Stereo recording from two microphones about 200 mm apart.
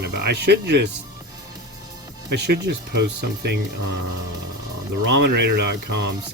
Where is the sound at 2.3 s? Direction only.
55° right (ahead or behind).